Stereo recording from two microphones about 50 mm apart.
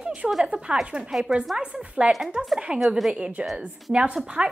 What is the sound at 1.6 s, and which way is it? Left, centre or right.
A woman's voice, right.